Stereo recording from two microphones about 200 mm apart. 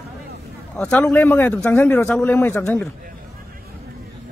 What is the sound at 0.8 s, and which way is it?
A man's voice, 5° left (ahead or behind).